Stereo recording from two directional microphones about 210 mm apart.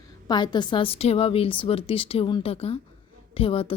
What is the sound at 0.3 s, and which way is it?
A woman's voice, 20° left (ahead or behind).